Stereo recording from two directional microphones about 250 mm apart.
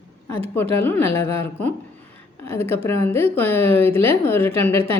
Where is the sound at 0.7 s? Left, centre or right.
Centre.